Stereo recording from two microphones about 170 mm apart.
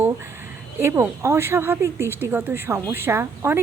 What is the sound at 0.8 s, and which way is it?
Speech, 15° right (ahead or behind).